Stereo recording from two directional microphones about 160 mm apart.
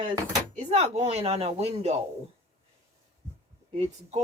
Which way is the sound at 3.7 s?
40° right (ahead or behind).